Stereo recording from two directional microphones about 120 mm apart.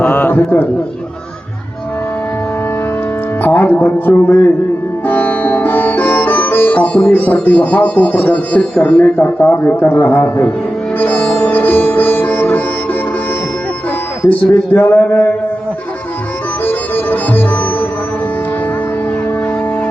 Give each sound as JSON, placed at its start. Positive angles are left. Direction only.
{"t": 0.0, "sound": "a sound", "side_deg": 15}
{"t": 3.4, "sound": "speech", "side_deg": 15}
{"t": 5.0, "sound": "sitar", "side_deg": 15}
{"t": 10.9, "sound": "music", "side_deg": 15}
{"t": 14.3, "sound": "speech", "side_deg": 15}
{"t": 16.6, "sound": "sitar", "side_deg": 15}